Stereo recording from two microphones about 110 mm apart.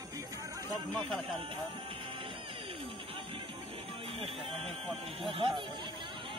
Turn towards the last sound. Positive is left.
turn(degrees=-50)  # may be behind; listen again after turning